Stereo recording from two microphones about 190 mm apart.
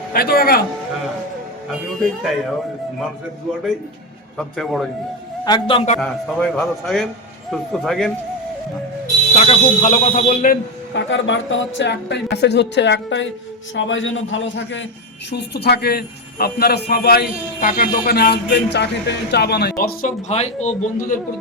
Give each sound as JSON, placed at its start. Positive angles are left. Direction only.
{"t": 0.1, "sound": "speech", "side_deg": 50}
{"t": 4.4, "sound": "a man's voice", "side_deg": 0}
{"t": 5.5, "sound": "a man's voice", "side_deg": 25}
{"t": 6.0, "sound": "a man's voice", "side_deg": 5}
{"t": 9.3, "sound": "speech", "side_deg": 35}
{"t": 10.9, "sound": "speech", "side_deg": 75}
{"t": 15.3, "sound": "a man's voice", "side_deg": 60}